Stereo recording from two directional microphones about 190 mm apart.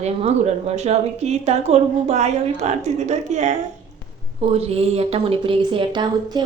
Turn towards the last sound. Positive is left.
turn(degrees=-25)  # may be behind; listen again after turning